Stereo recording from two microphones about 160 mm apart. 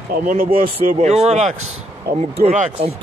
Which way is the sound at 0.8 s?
45° right (ahead or behind).